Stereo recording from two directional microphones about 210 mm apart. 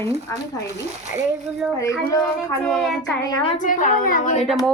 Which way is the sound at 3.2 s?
20° left (ahead or behind).